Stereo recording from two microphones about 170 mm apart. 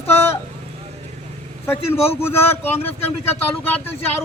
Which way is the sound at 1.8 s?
35° left (ahead or behind).